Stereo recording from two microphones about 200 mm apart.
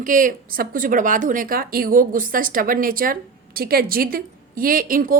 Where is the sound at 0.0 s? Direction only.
40° right (ahead or behind).